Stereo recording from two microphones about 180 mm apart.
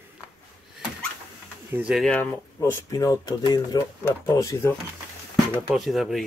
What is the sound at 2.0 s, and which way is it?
Speech, 10° left (ahead or behind).